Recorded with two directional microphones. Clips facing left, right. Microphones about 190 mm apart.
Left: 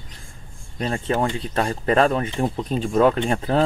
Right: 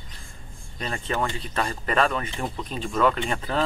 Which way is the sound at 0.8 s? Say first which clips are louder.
Left 5 dB; 35° left (ahead or behind).